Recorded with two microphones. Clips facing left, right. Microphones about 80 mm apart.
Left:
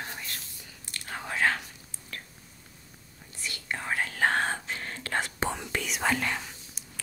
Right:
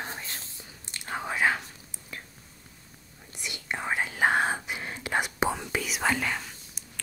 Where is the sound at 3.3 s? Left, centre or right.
Centre.